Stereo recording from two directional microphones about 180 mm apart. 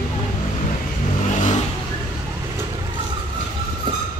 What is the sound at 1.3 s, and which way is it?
Vehicle, 40° left (ahead or behind).